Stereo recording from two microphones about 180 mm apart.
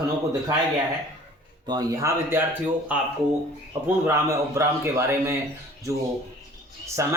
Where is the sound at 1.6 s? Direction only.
20° right (ahead or behind).